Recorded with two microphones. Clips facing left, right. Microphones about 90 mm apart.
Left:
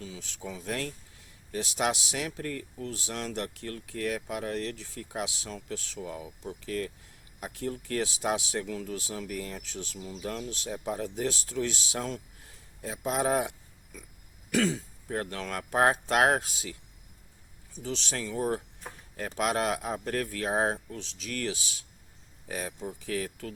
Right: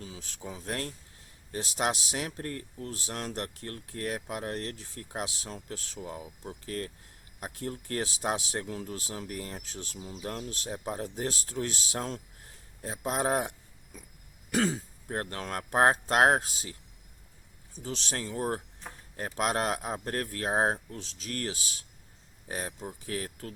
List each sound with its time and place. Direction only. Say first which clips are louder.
0.0 s speech: left 2 dB; 40° right (ahead or behind)
14.5 s speech: left 1 dB; 35° right (ahead or behind)
17.8 s speech: left 1 dB; 40° right (ahead or behind)
23.0 s speech: left 3 dB; 40° right (ahead or behind)